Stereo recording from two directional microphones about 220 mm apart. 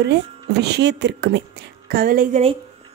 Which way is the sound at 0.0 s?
50° right (ahead or behind).